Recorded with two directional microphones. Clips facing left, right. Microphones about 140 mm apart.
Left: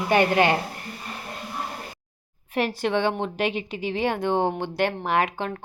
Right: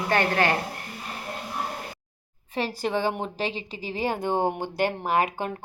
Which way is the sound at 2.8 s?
5° right (ahead or behind).